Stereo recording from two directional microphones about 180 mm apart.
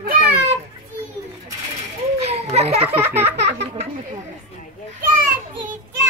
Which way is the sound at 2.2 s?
35° right (ahead or behind).